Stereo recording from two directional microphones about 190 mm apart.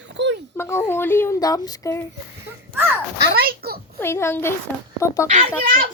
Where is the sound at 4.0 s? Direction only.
15° left (ahead or behind).